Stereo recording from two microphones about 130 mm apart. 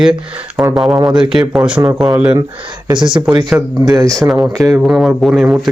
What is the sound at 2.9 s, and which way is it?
Speech, 35° right (ahead or behind).